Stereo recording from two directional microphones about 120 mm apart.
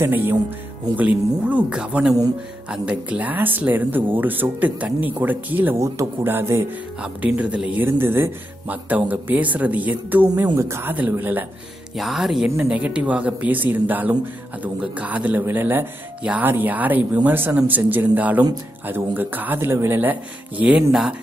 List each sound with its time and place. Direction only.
0.0 s speech: 15° right (ahead or behind)
12.0 s speech: centre (ahead or behind)